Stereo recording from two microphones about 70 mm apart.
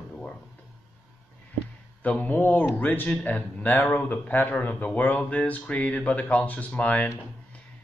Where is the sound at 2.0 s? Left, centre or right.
Left.